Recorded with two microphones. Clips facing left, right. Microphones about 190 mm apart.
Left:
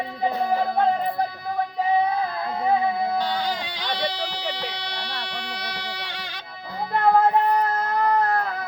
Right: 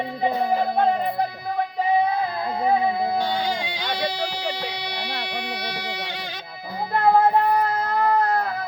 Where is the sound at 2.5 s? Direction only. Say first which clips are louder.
Right 1 dB; centre (ahead or behind).